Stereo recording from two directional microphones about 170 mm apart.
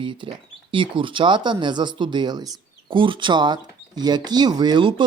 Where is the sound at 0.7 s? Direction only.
30° right (ahead or behind).